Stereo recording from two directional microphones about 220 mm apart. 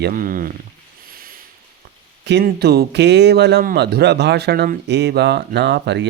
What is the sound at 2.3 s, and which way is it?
Speech, 50° right (ahead or behind).